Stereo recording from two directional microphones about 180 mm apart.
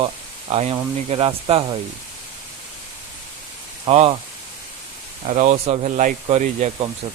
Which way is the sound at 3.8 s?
35° right (ahead or behind).